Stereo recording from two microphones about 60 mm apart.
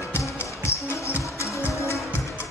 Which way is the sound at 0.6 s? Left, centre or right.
Left.